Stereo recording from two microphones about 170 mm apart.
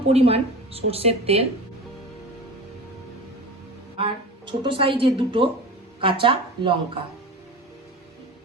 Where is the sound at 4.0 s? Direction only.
30° right (ahead or behind).